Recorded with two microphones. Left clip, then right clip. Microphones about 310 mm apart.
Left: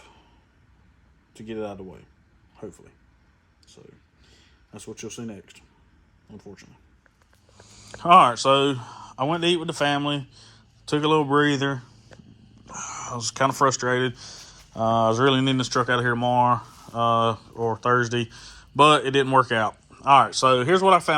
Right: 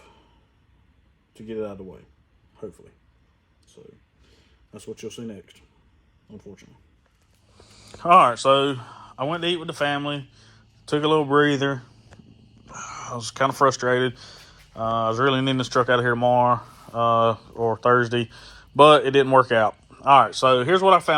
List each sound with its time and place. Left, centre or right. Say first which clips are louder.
4.7 s a man's voice: right 2 dB; left
6.3 s speech: even; centre